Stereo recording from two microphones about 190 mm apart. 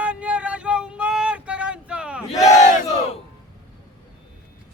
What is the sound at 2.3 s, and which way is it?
Battle cry, 40° left (ahead or behind).